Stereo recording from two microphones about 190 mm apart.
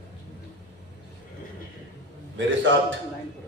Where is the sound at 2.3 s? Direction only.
75° right (ahead or behind).